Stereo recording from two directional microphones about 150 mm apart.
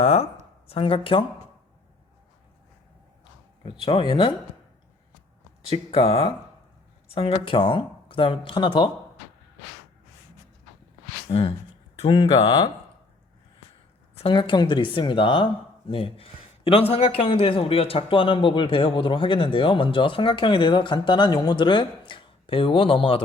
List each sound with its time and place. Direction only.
0.0 s speech: 40° left (ahead or behind)
3.6 s speech: 40° left (ahead or behind)
5.6 s speech: 40° left (ahead or behind)
11.3 s speech: 40° left (ahead or behind)
14.2 s speech: 35° left (ahead or behind)
15.9 s a sound: 40° left (ahead or behind)
16.9 s speech: 40° left (ahead or behind)